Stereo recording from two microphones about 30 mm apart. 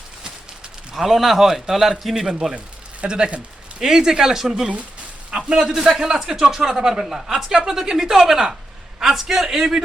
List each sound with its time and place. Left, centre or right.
0.9 s a man's voice: centre
3.1 s speech: right
3.8 s a man's voice: centre